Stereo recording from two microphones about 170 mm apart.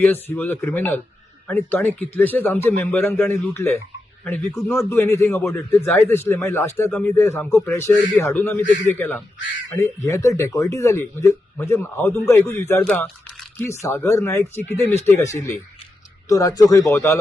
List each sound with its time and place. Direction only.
0.0 s speech: 10° left (ahead or behind)